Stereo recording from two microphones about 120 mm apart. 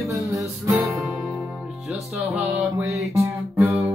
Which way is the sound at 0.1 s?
25° right (ahead or behind).